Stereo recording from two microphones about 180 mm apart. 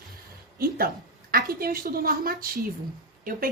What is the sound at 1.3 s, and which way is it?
A woman's voice, 55° right (ahead or behind).